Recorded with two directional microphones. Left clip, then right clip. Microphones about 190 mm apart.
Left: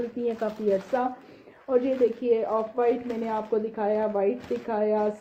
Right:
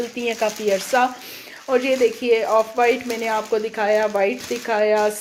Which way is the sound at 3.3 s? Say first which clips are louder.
Right 6 dB; 30° right (ahead or behind).